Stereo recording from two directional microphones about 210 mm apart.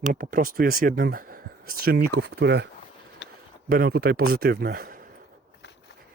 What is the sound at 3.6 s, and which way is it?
A man's voice, 45° right (ahead or behind).